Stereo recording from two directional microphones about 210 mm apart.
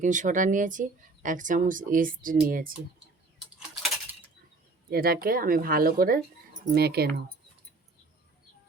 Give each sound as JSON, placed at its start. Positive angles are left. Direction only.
{"t": 0.0, "sound": "speech", "side_deg": -35}
{"t": 4.9, "sound": "speech", "side_deg": -45}